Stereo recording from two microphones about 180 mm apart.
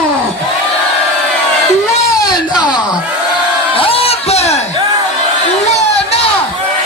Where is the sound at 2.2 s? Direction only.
20° left (ahead or behind).